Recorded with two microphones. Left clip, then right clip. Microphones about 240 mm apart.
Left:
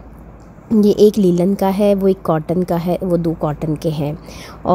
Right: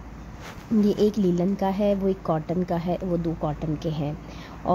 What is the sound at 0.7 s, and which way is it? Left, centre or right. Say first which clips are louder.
Speech: left 11 dB; left.